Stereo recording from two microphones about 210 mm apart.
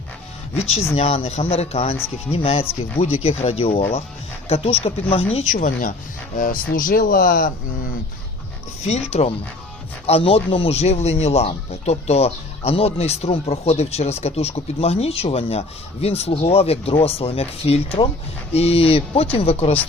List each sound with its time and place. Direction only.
0.9 s speech: 30° left (ahead or behind)
8.8 s speech: 30° left (ahead or behind)